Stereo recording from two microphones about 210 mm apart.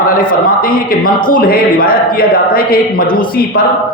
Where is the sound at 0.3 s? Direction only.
40° left (ahead or behind).